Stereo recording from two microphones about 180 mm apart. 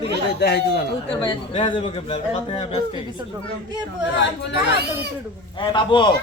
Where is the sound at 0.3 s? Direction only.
65° left (ahead or behind).